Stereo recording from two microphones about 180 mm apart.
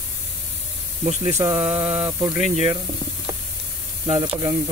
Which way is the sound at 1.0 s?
40° right (ahead or behind).